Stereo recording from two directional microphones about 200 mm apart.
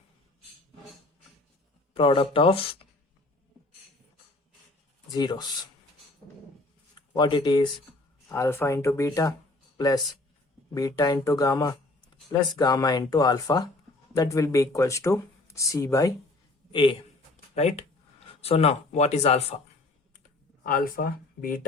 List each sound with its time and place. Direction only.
1.9 s speech: 25° left (ahead or behind)
5.1 s speech: 20° left (ahead or behind)
7.1 s speech: 20° left (ahead or behind)
20.7 s speech: 45° left (ahead or behind)